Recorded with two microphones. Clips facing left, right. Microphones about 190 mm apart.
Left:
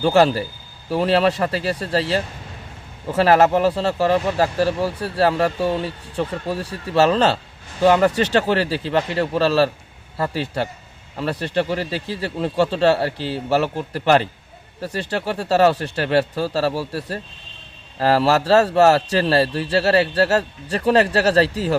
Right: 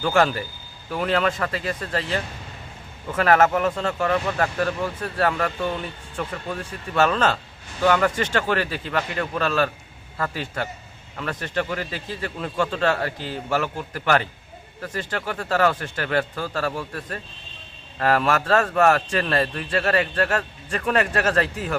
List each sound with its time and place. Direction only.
0.0 s a man's voice: 30° left (ahead or behind)